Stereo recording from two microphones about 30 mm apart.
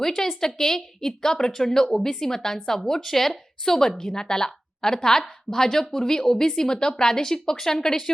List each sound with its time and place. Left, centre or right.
0.0 s a woman's voice: centre